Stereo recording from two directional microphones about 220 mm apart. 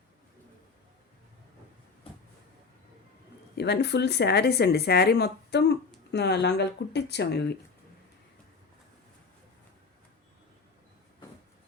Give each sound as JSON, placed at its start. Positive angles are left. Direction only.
{"t": 3.5, "sound": "speech", "side_deg": 50}